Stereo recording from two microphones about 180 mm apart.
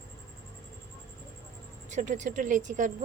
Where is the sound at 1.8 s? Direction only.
45° right (ahead or behind).